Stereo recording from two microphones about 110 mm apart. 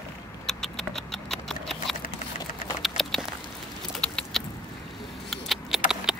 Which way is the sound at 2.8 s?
Centre (ahead or behind).